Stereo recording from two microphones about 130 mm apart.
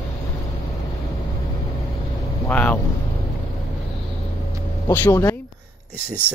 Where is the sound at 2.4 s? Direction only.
10° left (ahead or behind).